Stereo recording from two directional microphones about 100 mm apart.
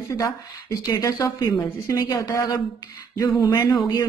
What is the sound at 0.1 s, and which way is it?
Speech, 35° left (ahead or behind).